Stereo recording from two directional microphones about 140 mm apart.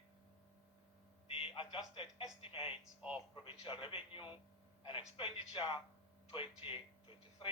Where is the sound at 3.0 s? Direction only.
10° right (ahead or behind).